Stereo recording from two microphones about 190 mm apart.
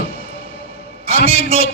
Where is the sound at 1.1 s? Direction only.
30° right (ahead or behind).